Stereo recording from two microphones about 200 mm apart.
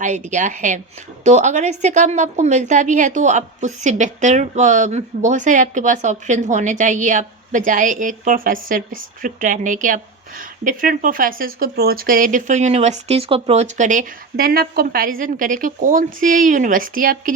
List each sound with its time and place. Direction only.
0.0 s a woman's voice: 35° right (ahead or behind)